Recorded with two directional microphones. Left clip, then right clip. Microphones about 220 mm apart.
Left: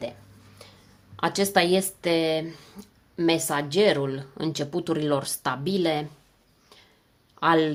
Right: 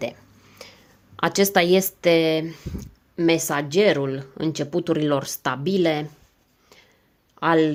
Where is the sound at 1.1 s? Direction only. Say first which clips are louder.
Right 3 dB; 30° right (ahead or behind).